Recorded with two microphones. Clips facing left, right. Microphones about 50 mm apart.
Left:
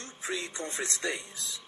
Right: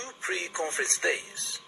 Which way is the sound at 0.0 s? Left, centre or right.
Right.